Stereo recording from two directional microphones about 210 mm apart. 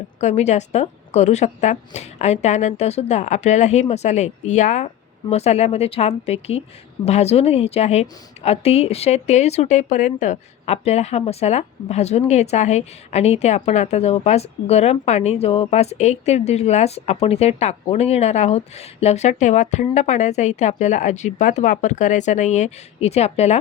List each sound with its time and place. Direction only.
0.2 s speech: 35° left (ahead or behind)